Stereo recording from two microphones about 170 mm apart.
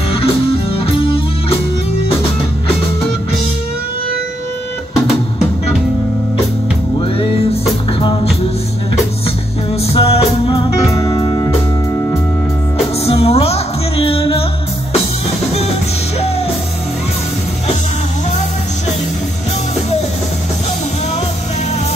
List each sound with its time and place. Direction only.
0.1 s music: 35° left (ahead or behind)
7.0 s music: 30° left (ahead or behind)
9.9 s music: 30° left (ahead or behind)
13.0 s music: 35° left (ahead or behind)